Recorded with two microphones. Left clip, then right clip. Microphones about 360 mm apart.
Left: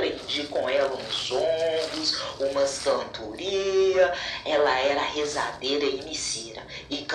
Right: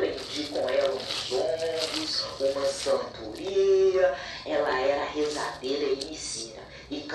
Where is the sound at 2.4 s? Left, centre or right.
Left.